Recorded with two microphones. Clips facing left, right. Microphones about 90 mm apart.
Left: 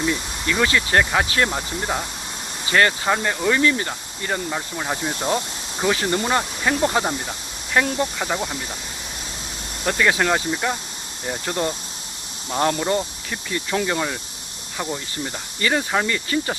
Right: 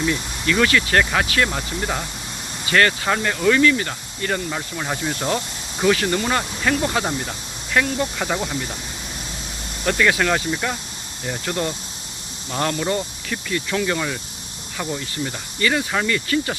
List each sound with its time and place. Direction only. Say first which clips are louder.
0.5 s speech: right 1 dB; 20° left (ahead or behind)
7.0 s speech: even; 10° left (ahead or behind)
7.8 s speech: even; 30° left (ahead or behind)
8.2 s speech: right 1 dB; 5° left (ahead or behind)
9.8 s speech: right 1 dB; 25° left (ahead or behind)
11.4 s speech: left 1 dB; 25° left (ahead or behind)
15.1 s speech: right 2 dB; 30° left (ahead or behind)